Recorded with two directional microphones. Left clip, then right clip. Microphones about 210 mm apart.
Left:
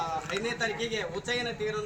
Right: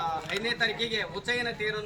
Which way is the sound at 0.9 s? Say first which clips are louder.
Right 2 dB; 5° left (ahead or behind).